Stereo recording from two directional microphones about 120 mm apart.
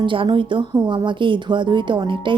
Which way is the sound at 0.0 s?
45° right (ahead or behind).